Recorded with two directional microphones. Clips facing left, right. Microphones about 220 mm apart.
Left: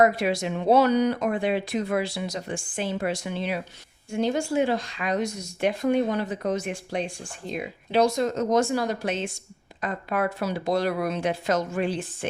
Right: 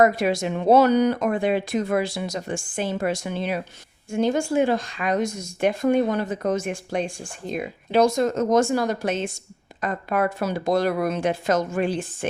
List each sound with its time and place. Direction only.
0.0 s speech: 45° right (ahead or behind)